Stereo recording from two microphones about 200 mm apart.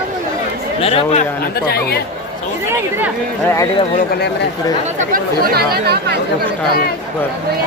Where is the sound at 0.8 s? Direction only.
30° left (ahead or behind).